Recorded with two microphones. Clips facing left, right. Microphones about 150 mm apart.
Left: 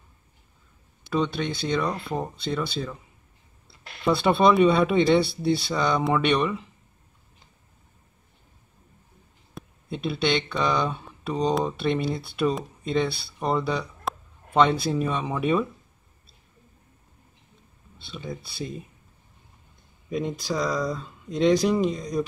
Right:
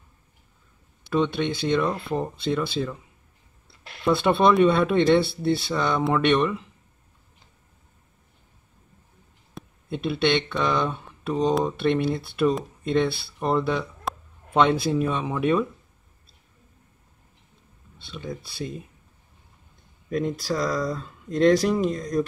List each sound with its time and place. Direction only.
1.1 s speech: 5° right (ahead or behind)
4.0 s speech: centre (ahead or behind)
9.5 s speech: centre (ahead or behind)
18.0 s speech: 5° left (ahead or behind)
20.1 s speech: centre (ahead or behind)